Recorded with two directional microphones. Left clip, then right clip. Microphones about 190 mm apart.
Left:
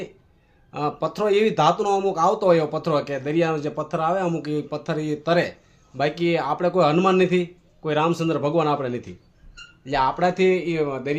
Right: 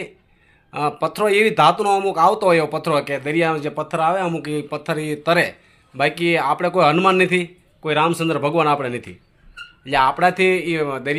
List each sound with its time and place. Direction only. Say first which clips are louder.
0.7 s speech: right 4 dB; 5° right (ahead or behind)